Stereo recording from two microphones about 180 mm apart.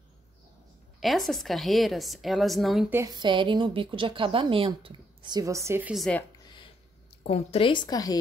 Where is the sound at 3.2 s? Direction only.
25° right (ahead or behind); by 6.0 s 10° right (ahead or behind).